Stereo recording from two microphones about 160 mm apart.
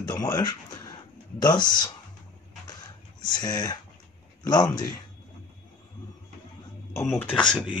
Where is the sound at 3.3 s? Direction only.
25° left (ahead or behind).